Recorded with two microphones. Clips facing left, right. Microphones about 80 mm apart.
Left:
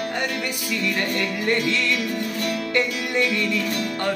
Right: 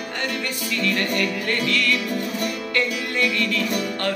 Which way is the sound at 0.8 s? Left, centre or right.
Left.